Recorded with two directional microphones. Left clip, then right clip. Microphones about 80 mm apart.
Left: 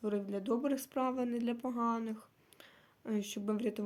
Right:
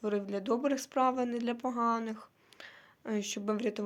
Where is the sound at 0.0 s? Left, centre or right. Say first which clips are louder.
Right 3 dB; left.